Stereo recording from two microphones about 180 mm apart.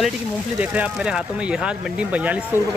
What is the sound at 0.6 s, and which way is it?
Speech, 10° right (ahead or behind).